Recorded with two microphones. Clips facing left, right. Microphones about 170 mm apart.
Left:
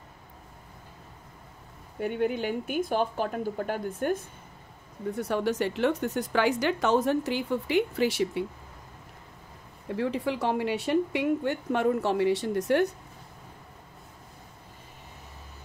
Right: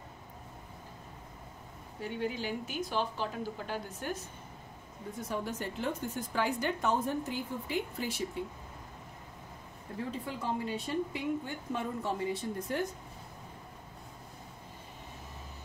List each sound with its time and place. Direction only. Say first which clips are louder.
2.0 s speech: left 8 dB; 60° left (ahead or behind)
5.1 s speech: left 9 dB; 70° left (ahead or behind)
9.9 s a woman's voice: left 9 dB; 80° left